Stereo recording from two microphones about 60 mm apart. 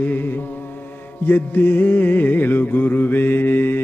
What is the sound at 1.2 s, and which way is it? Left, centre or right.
Music, left.